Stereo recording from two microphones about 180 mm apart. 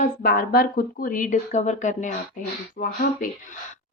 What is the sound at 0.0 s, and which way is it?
A woman's voice, 55° left (ahead or behind).